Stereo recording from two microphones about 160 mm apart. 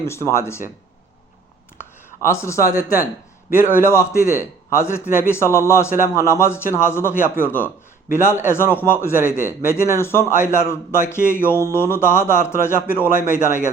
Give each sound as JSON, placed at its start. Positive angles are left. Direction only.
{"t": 0.0, "sound": "a man's voice", "side_deg": 15}
{"t": 2.0, "sound": "a man's voice", "side_deg": 15}